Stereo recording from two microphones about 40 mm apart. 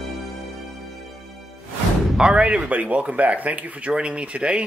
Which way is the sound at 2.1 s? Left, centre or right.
Right.